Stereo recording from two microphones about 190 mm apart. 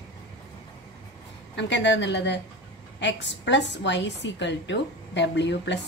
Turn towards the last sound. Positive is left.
turn(degrees=70)  # may be behind; listen again after turning